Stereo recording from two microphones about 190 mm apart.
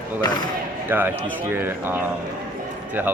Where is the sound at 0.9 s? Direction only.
10° right (ahead or behind).